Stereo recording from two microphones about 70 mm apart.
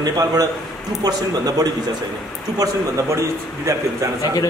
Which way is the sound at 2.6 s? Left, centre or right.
Right.